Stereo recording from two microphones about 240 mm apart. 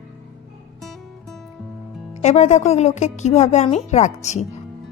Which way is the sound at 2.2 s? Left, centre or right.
Left.